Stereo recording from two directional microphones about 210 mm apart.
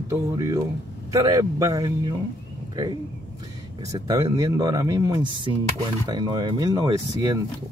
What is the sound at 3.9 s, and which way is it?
Speech, 15° right (ahead or behind).